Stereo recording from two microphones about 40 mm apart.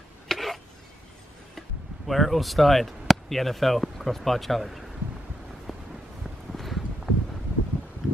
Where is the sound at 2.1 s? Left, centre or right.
Centre.